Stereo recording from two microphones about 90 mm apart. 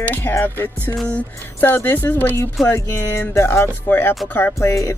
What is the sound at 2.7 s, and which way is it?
Speech, 30° left (ahead or behind).